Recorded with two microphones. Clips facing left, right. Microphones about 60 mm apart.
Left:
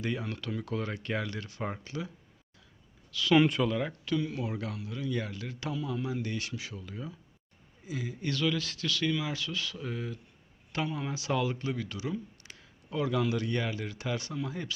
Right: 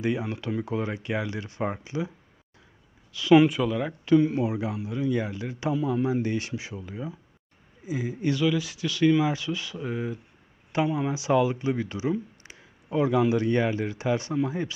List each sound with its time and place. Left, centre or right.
0.0 s a man's voice: centre
3.4 s speech: centre
4.0 s a man's voice: right